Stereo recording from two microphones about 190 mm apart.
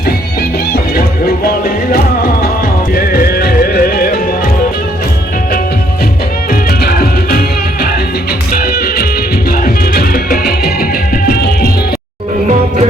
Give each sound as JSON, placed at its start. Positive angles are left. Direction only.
{"t": 2.9, "sound": "music", "side_deg": 50}
{"t": 6.5, "sound": "music", "side_deg": 50}